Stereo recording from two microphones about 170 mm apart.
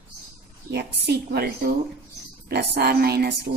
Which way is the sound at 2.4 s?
70° right (ahead or behind).